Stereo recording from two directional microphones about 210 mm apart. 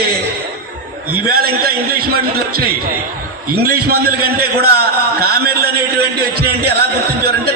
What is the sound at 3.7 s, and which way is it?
A man's voice, 45° right (ahead or behind).